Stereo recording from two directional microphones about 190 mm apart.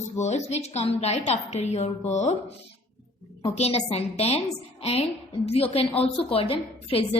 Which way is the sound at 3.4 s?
35° left (ahead or behind).